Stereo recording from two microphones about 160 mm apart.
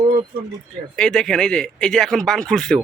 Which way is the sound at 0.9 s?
5° left (ahead or behind).